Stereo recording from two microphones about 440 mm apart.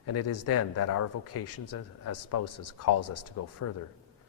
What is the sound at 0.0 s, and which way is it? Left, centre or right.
Speech, left.